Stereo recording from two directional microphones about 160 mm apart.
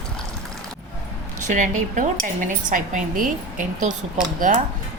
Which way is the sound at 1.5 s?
50° right (ahead or behind).